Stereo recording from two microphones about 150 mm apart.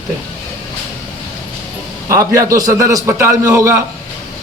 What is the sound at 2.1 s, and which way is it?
A man's voice, 20° right (ahead or behind).